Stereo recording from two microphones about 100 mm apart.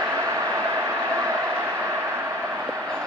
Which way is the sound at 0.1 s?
25° right (ahead or behind).